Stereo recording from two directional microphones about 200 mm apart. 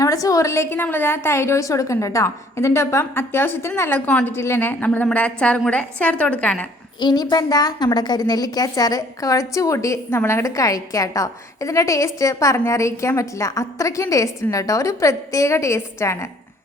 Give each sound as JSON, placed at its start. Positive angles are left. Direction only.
{"t": 0.0, "sound": "a woman's voice", "side_deg": 15}
{"t": 7.0, "sound": "a woman's voice", "side_deg": 20}